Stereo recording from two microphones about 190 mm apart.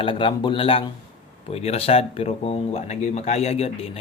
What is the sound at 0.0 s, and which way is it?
Speech, 25° left (ahead or behind).